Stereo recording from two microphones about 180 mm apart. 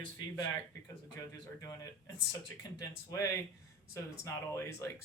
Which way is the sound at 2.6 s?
20° left (ahead or behind).